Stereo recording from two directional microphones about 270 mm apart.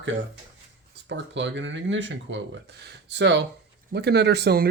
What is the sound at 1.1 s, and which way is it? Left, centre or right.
Speech, right.